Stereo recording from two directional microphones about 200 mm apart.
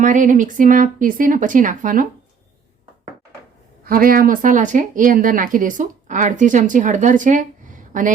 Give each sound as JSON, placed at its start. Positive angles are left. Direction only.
{"t": 0.0, "sound": "speech", "side_deg": -40}
{"t": 3.8, "sound": "speech", "side_deg": -45}